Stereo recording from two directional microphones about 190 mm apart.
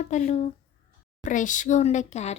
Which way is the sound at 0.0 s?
35° left (ahead or behind).